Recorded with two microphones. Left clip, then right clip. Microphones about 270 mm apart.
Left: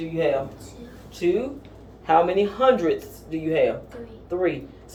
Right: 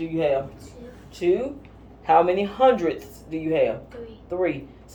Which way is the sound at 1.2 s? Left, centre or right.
Right.